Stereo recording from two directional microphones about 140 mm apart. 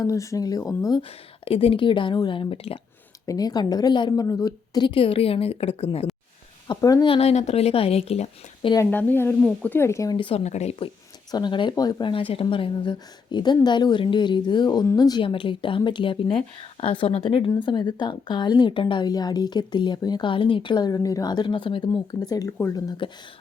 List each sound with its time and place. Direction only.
0.0 s speech: 25° left (ahead or behind)
1.5 s a woman's voice: 40° left (ahead or behind)
3.2 s a woman's voice: 30° left (ahead or behind); by 6.1 s 45° left (ahead or behind)
6.7 s speech: 30° left (ahead or behind)
7.1 s speech: 50° left (ahead or behind)
8.7 s speech: 15° left (ahead or behind)
10.2 s a woman's voice: 40° left (ahead or behind)
10.4 s speech: 55° left (ahead or behind)
11.3 s a woman's voice: 30° left (ahead or behind)